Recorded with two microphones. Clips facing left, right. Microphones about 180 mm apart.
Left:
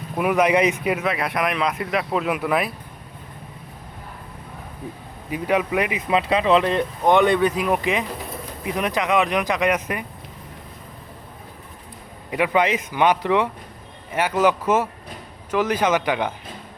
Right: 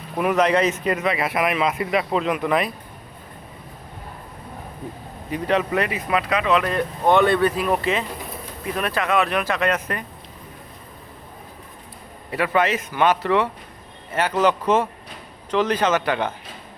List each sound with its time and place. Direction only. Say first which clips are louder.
0.2 s speech: even; 10° left (ahead or behind)
5.3 s speech: even; 10° left (ahead or behind)
12.3 s speech: left 1 dB; 15° left (ahead or behind)